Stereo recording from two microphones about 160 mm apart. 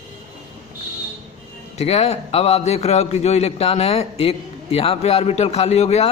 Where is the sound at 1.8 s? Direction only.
40° left (ahead or behind).